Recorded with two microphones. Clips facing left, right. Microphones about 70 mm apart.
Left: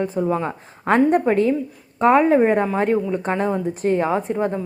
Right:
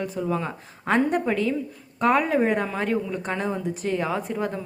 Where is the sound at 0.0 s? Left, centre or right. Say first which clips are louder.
Left 6 dB; left.